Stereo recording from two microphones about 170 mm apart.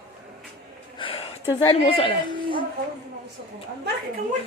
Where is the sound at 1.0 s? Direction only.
35° left (ahead or behind).